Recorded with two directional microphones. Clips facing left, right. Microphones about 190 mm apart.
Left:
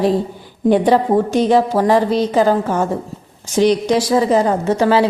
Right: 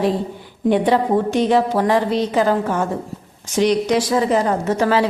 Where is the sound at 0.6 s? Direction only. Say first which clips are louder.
Left 3 dB; 40° left (ahead or behind).